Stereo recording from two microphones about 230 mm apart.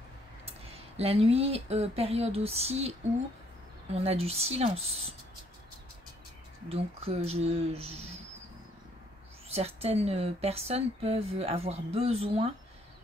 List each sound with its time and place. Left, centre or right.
0.5 s speech: right
3.9 s speech: right
6.7 s speech: right
9.5 s speech: right